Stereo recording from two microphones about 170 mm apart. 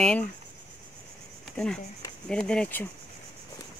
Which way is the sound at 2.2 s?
5° left (ahead or behind).